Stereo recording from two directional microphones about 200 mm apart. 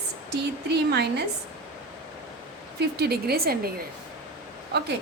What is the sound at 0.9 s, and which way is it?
Speech, 55° right (ahead or behind).